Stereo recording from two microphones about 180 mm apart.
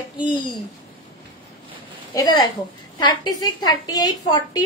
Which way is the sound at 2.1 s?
25° left (ahead or behind).